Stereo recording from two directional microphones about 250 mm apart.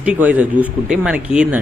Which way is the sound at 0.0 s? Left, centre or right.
Centre.